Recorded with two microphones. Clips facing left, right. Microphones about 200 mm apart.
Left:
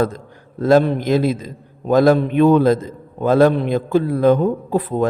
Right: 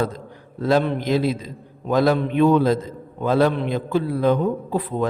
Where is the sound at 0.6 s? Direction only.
45° left (ahead or behind).